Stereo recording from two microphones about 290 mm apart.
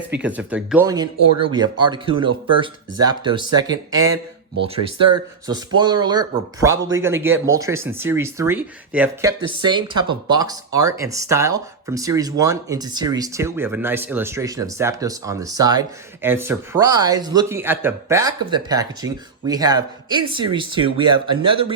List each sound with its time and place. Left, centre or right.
0.2 s speech: centre